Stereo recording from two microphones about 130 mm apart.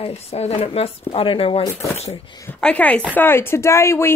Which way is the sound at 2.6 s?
10° left (ahead or behind).